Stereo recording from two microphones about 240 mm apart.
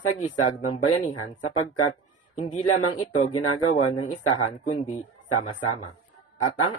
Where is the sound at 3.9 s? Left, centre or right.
Left.